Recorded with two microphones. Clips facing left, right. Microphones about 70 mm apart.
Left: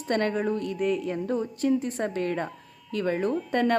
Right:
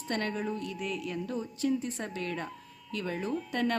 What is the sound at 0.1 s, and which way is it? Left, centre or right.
A woman's voice, left.